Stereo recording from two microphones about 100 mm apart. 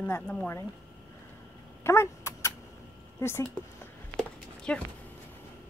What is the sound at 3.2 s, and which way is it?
Speech, 25° left (ahead or behind).